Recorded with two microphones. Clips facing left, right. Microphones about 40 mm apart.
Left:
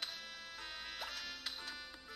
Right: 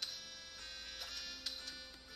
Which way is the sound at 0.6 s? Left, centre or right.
Centre.